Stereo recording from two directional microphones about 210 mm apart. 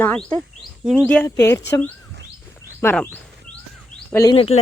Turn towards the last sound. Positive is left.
turn(degrees=25)  # may be behind; listen again after turning